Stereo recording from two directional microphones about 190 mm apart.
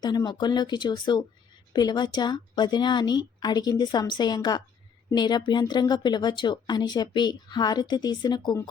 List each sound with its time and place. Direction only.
0.0 s speech: 20° left (ahead or behind)